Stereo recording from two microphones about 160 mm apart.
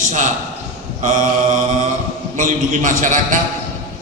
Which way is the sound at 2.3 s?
55° right (ahead or behind).